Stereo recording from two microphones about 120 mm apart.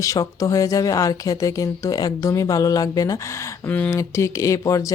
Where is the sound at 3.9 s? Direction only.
25° left (ahead or behind).